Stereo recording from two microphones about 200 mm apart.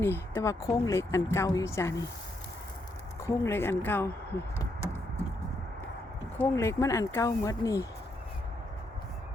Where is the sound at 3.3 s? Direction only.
15° left (ahead or behind).